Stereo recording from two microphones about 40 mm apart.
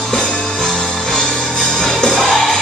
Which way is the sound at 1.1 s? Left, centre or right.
Left.